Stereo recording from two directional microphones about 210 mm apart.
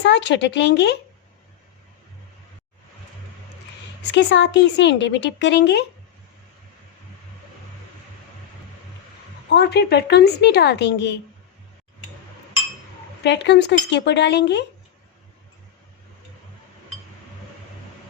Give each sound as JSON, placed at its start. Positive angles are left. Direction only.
{"t": 0.0, "sound": "speech", "side_deg": 55}
{"t": 4.1, "sound": "speech", "side_deg": 55}
{"t": 9.5, "sound": "a woman's voice", "side_deg": 50}
{"t": 13.2, "sound": "speech", "side_deg": 55}